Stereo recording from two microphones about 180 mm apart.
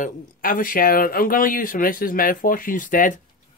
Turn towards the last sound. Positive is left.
turn(degrees=45)  # may be behind; listen again after turning